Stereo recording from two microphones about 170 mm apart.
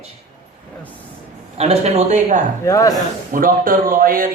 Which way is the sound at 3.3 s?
55° right (ahead or behind).